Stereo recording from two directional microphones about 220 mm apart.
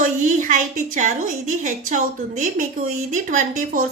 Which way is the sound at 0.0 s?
35° right (ahead or behind).